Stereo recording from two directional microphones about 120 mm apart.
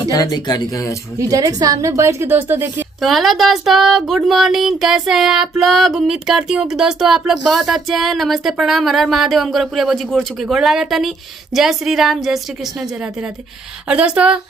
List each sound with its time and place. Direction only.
0.1 s speech: 30° left (ahead or behind)
1.2 s a woman's voice: 30° right (ahead or behind)
3.0 s speech: centre (ahead or behind)
13.8 s speech: 10° right (ahead or behind)